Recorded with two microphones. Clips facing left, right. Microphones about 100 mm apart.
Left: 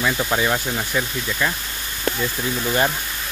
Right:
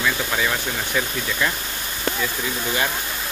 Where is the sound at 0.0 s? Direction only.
20° left (ahead or behind).